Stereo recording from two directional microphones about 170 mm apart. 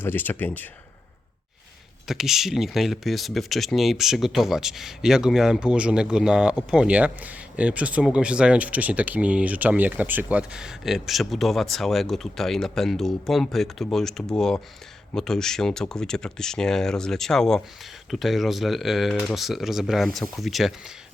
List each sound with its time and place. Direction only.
0.0 s speech: 10° left (ahead or behind)
2.0 s speech: centre (ahead or behind)